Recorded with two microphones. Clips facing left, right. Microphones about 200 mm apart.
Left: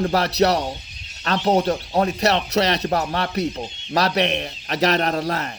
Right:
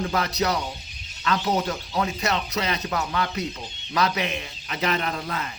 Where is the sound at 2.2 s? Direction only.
70° left (ahead or behind).